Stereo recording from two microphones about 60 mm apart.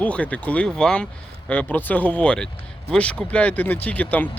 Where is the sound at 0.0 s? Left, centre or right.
Left.